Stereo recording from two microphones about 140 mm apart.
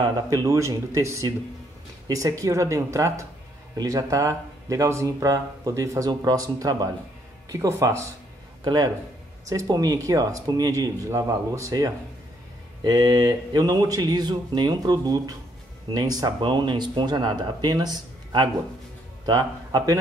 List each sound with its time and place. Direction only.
0.0 s speech: 25° right (ahead or behind)